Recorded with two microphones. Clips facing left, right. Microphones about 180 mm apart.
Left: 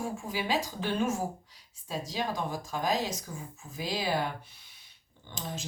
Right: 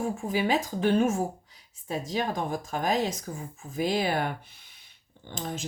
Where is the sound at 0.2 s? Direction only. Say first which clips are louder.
Right 5 dB; 55° right (ahead or behind).